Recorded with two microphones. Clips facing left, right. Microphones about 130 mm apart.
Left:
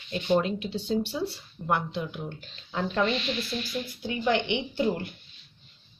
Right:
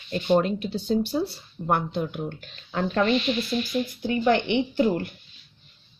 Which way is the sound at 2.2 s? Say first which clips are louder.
Right 4 dB; 60° right (ahead or behind).